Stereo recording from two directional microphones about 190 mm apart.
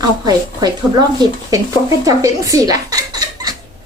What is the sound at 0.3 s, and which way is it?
Speech, 20° right (ahead or behind).